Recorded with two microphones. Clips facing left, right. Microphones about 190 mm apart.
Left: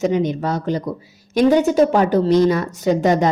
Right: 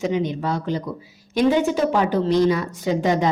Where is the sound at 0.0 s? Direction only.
45° left (ahead or behind).